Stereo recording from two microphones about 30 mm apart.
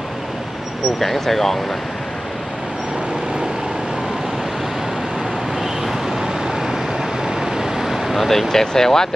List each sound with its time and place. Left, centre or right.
0.9 s speech: centre
5.6 s vehicle: centre
8.2 s speech: centre